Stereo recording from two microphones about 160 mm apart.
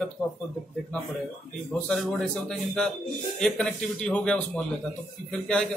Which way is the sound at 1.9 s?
Centre (ahead or behind).